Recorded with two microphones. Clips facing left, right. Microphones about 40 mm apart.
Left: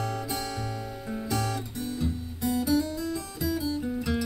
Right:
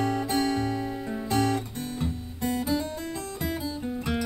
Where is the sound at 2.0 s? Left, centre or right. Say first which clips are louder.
Even; right.